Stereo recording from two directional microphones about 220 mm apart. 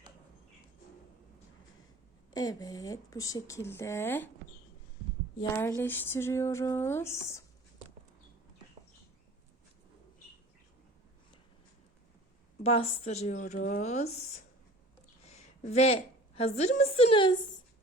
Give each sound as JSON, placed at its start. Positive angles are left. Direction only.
{"t": 2.3, "sound": "speech", "side_deg": 15}
{"t": 5.4, "sound": "speech", "side_deg": 10}
{"t": 12.6, "sound": "a woman's voice", "side_deg": 30}
{"t": 15.3, "sound": "a woman's voice", "side_deg": 30}